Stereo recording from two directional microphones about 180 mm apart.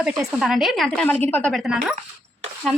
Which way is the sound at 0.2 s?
Centre (ahead or behind).